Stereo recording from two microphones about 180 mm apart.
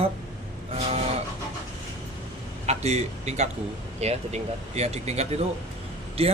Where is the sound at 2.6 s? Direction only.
40° right (ahead or behind).